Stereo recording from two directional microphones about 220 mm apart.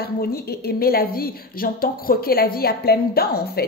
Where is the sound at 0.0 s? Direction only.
45° left (ahead or behind).